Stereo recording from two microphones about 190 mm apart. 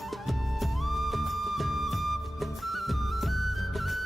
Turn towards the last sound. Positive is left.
turn(degrees=0)  # may be behind; listen again after turning